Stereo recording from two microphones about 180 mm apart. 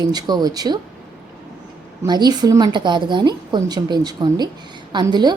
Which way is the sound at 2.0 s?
25° right (ahead or behind).